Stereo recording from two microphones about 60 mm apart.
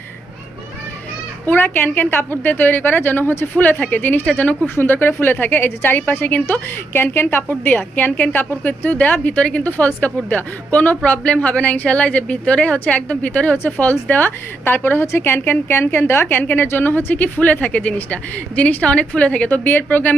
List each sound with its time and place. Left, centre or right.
1.5 s a woman's voice: left
19.5 s a woman's voice: left